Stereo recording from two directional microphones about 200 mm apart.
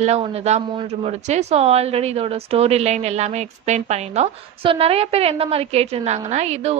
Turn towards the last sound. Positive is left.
turn(degrees=-35)  # may be behind; listen again after turning